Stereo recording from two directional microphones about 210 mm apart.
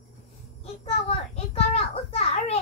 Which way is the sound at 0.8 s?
30° left (ahead or behind).